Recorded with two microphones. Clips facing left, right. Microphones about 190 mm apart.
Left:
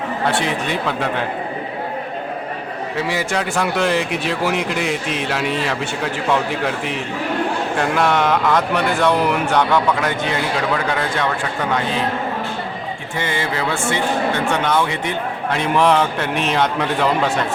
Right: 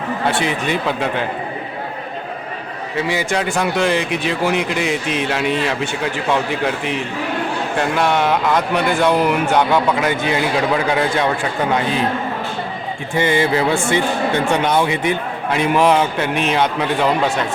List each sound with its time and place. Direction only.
0.3 s a man's voice: centre (ahead or behind)
3.1 s a man's voice: centre (ahead or behind)
7.8 s a man's voice: centre (ahead or behind)
13.1 s music: 15° right (ahead or behind)
15.5 s a man's voice: 10° right (ahead or behind)